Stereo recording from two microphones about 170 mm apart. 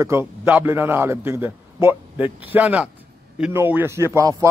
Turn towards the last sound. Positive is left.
turn(degrees=-15)  # may be behind; listen again after turning